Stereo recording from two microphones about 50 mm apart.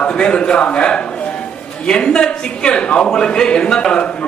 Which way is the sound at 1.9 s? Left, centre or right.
Centre.